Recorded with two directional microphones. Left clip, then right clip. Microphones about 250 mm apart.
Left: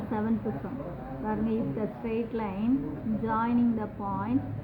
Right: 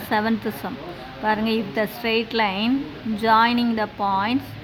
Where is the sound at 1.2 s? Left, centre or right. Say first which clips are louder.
Right 10 dB; right.